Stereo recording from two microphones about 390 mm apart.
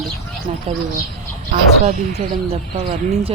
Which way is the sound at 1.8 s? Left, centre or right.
Centre.